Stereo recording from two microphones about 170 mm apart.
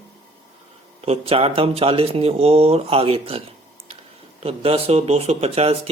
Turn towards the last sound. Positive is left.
turn(degrees=-35)  # may be behind; listen again after turning